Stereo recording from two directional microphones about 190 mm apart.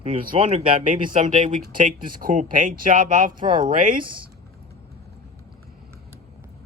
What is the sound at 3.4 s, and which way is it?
Speech, 25° right (ahead or behind).